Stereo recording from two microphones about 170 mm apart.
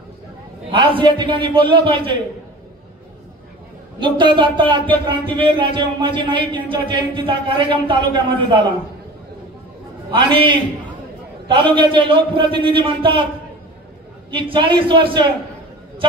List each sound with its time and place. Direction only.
0.7 s speech: 30° right (ahead or behind)
4.0 s speech: 30° right (ahead or behind)
10.1 s speech: 30° right (ahead or behind)
14.3 s speech: 30° right (ahead or behind)